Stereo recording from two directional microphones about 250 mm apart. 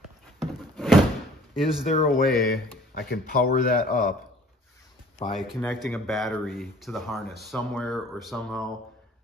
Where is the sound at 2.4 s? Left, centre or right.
Left.